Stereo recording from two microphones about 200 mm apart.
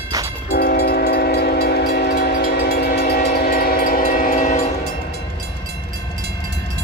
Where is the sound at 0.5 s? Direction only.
55° left (ahead or behind); by 4.7 s 40° left (ahead or behind).